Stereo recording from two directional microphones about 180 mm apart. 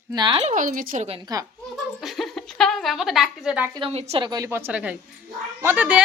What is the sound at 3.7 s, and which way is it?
A woman's voice, 30° right (ahead or behind).